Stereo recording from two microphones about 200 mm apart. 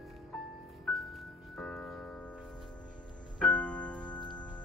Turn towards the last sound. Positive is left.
turn(degrees=20)  # may be behind; listen again after turning